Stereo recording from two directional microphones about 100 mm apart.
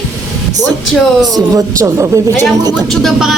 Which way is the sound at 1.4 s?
35° right (ahead or behind).